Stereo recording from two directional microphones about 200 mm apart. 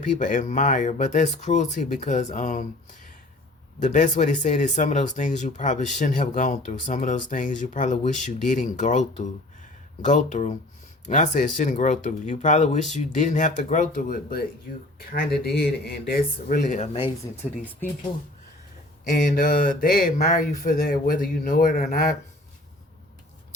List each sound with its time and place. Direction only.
0.2 s speech: 40° left (ahead or behind)
3.8 s speech: 40° left (ahead or behind)
19.1 s speech: 40° left (ahead or behind)